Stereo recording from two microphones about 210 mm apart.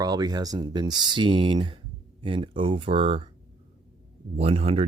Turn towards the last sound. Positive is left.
turn(degrees=-25)  # may be behind; listen again after turning